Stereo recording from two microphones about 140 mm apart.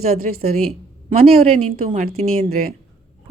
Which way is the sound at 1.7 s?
75° right (ahead or behind).